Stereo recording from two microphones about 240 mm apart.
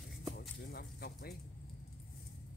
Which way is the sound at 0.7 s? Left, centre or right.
Left.